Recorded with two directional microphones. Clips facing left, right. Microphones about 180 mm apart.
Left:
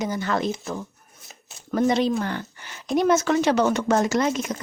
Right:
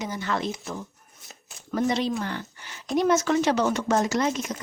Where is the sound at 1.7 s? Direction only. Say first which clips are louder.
Left 4 dB; 55° left (ahead or behind).